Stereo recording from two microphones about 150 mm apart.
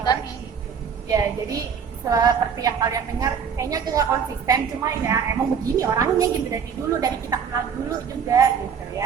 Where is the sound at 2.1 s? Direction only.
25° right (ahead or behind).